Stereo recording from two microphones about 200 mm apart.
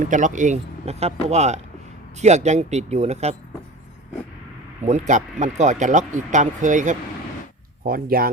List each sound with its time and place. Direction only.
0.0 s speech: 40° right (ahead or behind)
4.8 s speech: 35° right (ahead or behind)